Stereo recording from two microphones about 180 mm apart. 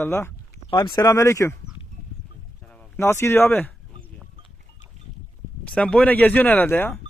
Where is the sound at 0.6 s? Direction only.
25° left (ahead or behind).